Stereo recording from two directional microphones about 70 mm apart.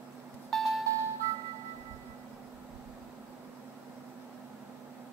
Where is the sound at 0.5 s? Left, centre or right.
Centre.